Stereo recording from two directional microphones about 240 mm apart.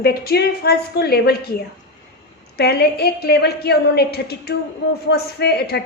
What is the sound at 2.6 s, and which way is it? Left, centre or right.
A woman's voice, left.